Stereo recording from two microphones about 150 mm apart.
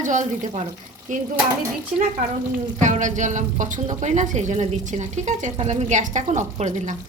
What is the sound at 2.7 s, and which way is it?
Speech, 55° right (ahead or behind).